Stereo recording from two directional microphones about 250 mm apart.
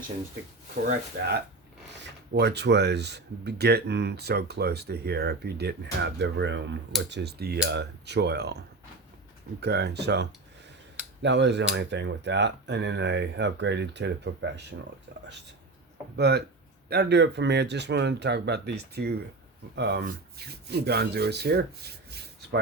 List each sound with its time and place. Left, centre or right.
2.3 s speech: right